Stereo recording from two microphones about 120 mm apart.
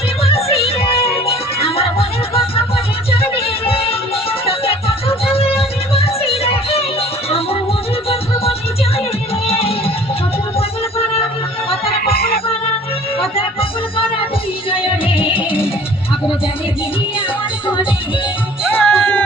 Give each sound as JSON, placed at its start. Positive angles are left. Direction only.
{"t": 0.2, "sound": "music", "side_deg": 55}
{"t": 9.5, "sound": "music", "side_deg": 55}
{"t": 13.3, "sound": "music", "side_deg": 50}
{"t": 18.9, "sound": "music", "side_deg": 10}